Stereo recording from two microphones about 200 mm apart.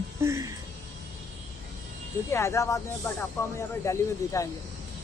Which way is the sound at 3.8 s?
15° left (ahead or behind).